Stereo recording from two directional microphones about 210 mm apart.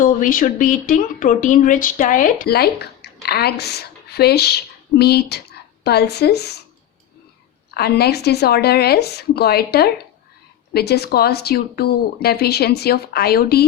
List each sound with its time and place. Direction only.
0.0 s a woman's voice: 40° left (ahead or behind)
7.7 s speech: 50° left (ahead or behind)